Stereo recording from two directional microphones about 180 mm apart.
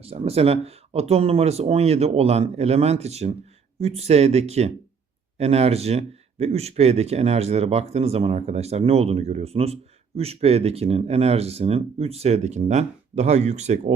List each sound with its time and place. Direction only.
0.0 s speech: 35° right (ahead or behind)